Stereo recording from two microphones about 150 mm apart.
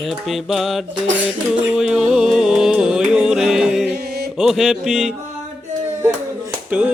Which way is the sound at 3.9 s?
90° right.